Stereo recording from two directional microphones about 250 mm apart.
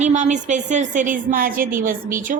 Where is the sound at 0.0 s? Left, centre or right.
Right.